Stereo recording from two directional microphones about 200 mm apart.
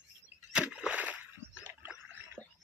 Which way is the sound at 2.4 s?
10° left (ahead or behind).